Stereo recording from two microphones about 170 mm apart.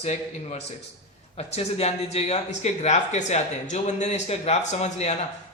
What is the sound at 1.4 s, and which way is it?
Speech, 40° left (ahead or behind).